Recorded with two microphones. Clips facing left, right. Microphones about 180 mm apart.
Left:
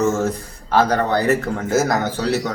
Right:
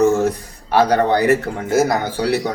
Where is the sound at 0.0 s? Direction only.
15° right (ahead or behind).